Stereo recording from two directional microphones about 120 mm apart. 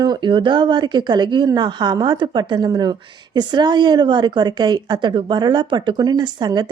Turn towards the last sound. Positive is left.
turn(degrees=-35)  # may be behind; listen again after turning